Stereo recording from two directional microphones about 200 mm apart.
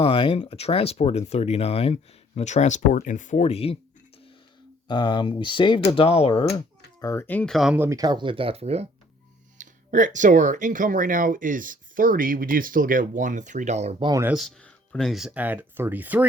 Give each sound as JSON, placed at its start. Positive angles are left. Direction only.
{"t": 0.0, "sound": "speech", "side_deg": 25}
{"t": 4.9, "sound": "speech", "side_deg": 20}
{"t": 7.0, "sound": "speech", "side_deg": 15}
{"t": 7.9, "sound": "speech", "side_deg": -20}
{"t": 14.1, "sound": "speech", "side_deg": -10}
{"t": 14.3, "sound": "speech", "side_deg": 0}